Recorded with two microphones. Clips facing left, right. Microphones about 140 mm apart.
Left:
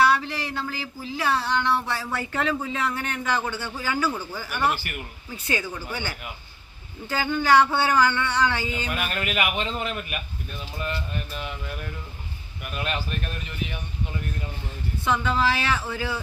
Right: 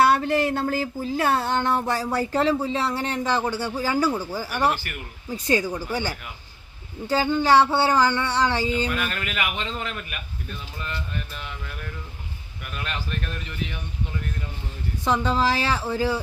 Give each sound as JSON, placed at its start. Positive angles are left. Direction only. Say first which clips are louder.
{"t": 0.0, "sound": "a sound", "louder": "right 3 dB", "side_deg": -50}
{"t": 2.1, "sound": "speech", "louder": "right 5 dB", "side_deg": -35}
{"t": 4.1, "sound": "speech", "louder": "right 5 dB", "side_deg": -10}
{"t": 4.4, "sound": "speech", "louder": "right 2 dB", "side_deg": -35}
{"t": 8.9, "sound": "a man's voice", "louder": "even", "side_deg": 15}
{"t": 11.3, "sound": "a man's voice", "louder": "left 3 dB", "side_deg": 15}
{"t": 15.0, "sound": "speech", "louder": "right 1 dB", "side_deg": -35}